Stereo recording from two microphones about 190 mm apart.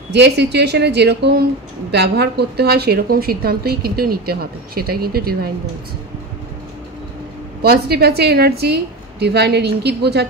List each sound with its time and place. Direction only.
0.1 s a woman's voice: 60° right (ahead or behind)
7.6 s a woman's voice: 55° right (ahead or behind)